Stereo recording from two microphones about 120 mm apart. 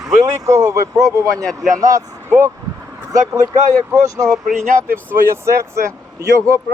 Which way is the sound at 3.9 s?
25° right (ahead or behind).